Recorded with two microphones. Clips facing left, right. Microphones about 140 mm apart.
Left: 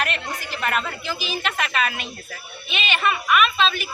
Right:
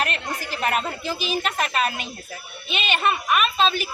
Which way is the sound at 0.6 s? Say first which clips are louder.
Right 1 dB; 35° right (ahead or behind).